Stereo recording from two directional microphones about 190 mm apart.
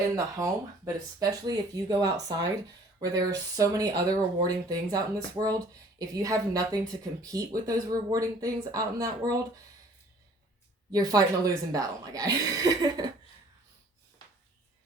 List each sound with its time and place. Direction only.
0.2 s speech: 15° right (ahead or behind)
10.9 s speech: 20° right (ahead or behind)